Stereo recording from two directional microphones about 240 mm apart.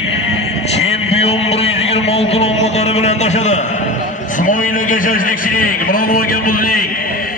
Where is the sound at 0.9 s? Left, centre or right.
Left.